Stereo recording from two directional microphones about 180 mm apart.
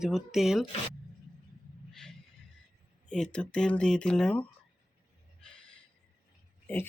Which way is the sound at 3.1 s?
5° left (ahead or behind).